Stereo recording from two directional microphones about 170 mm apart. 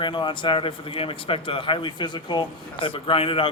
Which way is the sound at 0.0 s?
25° left (ahead or behind).